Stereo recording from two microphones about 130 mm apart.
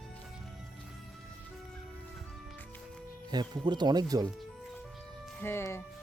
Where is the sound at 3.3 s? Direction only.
35° right (ahead or behind).